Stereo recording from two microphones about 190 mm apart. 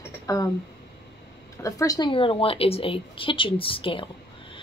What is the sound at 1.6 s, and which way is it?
A woman's voice, 15° left (ahead or behind).